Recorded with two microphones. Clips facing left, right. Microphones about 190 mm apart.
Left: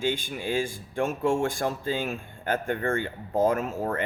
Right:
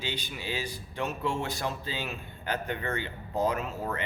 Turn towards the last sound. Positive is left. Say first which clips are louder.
# left 5 dB
turn(degrees=45)  # may be behind; listen again after turning